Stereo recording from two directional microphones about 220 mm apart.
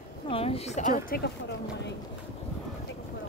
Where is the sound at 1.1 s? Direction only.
50° left (ahead or behind).